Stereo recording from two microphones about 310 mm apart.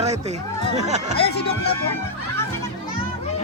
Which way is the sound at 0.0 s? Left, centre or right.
Right.